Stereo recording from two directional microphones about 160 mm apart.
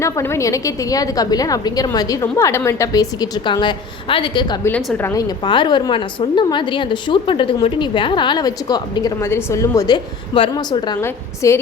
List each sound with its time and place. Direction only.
0.0 s a woman's voice: 15° left (ahead or behind)
5.5 s a woman's voice: 30° left (ahead or behind)
11.0 s a woman's voice: 15° left (ahead or behind)